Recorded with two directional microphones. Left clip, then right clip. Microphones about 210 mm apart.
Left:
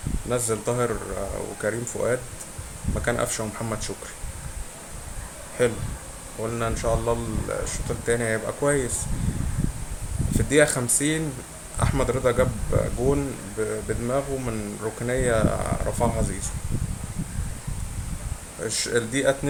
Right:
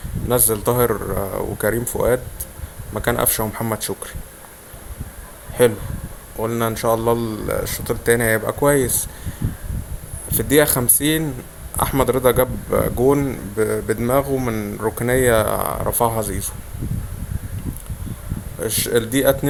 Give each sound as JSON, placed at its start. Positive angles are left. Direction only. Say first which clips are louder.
{"t": 0.3, "sound": "a man's voice", "louder": "right 7 dB", "side_deg": -40}
{"t": 5.6, "sound": "a man's voice", "louder": "right 8 dB", "side_deg": -40}
{"t": 10.3, "sound": "a man's voice", "louder": "right 4 dB", "side_deg": -40}
{"t": 18.6, "sound": "a man's voice", "louder": "right 5 dB", "side_deg": -35}